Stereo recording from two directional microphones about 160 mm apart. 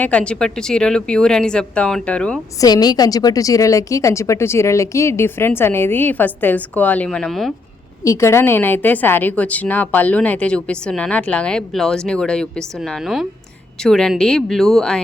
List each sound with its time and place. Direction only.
0.0 s speech: 5° left (ahead or behind)
2.6 s a woman's voice: 25° left (ahead or behind); by 7.5 s centre (ahead or behind)
8.0 s a woman's voice: 20° left (ahead or behind)